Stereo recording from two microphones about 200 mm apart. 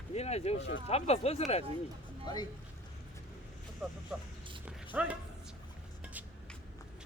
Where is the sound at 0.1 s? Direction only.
30° left (ahead or behind).